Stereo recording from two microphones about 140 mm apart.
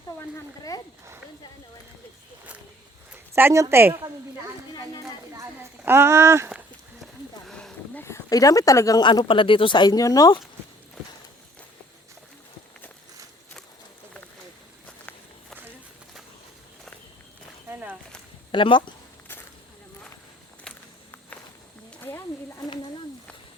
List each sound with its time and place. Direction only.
3.1 s a woman's voice: 15° right (ahead or behind)
5.8 s speech: 15° right (ahead or behind)
7.0 s a sound: 5° left (ahead or behind)
8.0 s speech: 20° left (ahead or behind)
14.8 s walk: 5° left (ahead or behind)
17.7 s a sound: 15° right (ahead or behind)
18.5 s speech: 35° left (ahead or behind)
20.7 s walk: 5° left (ahead or behind)
22.0 s wild animals: 20° left (ahead or behind)